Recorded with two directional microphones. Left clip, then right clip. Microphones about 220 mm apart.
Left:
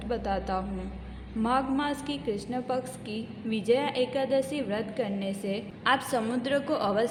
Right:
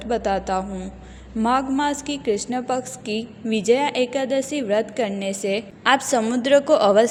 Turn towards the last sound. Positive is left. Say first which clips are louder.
# right 12 dB
turn(degrees=-35)  # may be behind; listen again after turning